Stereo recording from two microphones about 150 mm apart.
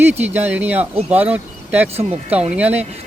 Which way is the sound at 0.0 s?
15° right (ahead or behind).